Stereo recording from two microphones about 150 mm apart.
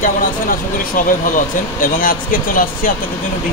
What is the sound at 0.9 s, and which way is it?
Speech, 65° left (ahead or behind).